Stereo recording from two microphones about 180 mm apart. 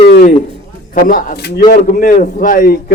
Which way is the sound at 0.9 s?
50° left (ahead or behind).